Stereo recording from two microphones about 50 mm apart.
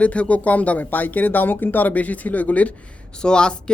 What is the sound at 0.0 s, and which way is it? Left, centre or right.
Speech, left.